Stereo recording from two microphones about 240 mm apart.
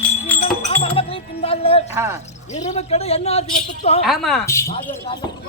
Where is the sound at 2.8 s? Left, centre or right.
Left.